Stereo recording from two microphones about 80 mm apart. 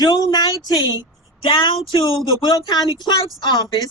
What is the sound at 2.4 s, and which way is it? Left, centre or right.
Speech, left.